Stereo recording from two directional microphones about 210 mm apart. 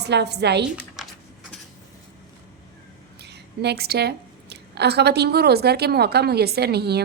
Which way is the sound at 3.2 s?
50° right (ahead or behind).